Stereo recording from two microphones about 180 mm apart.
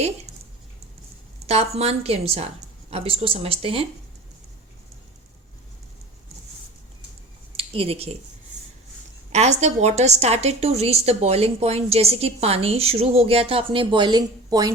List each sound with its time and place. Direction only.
1.5 s a woman's voice: 35° right (ahead or behind)
7.5 s a sound: 30° right (ahead or behind)
9.3 s a woman's voice: 40° right (ahead or behind); by 14.7 s 20° right (ahead or behind)